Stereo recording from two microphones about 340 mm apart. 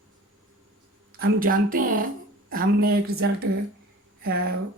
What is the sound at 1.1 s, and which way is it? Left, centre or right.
A woman's voice, right.